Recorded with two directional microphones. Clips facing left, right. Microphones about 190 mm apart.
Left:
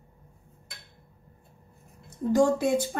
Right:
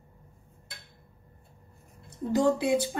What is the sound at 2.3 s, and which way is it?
Speech, 45° left (ahead or behind).